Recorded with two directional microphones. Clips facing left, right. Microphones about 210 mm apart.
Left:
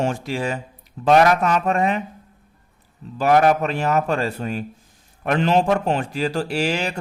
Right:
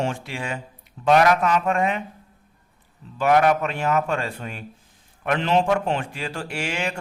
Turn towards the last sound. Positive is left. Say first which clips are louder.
# left 5 dB
turn(degrees=35)  # may be behind; listen again after turning